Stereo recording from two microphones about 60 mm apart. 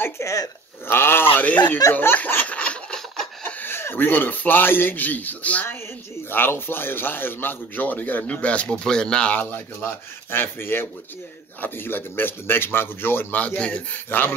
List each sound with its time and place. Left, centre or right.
0.0 s speech: left
0.8 s a sound: left
1.4 s a man's voice: left
2.0 s snicker: left
3.4 s a sound: left
3.7 s a man's voice: left
6.3 s a man's voice: left; by 9.3 s centre
9.3 s a man's voice: left
13.4 s a man's voice: left
13.9 s a man's voice: left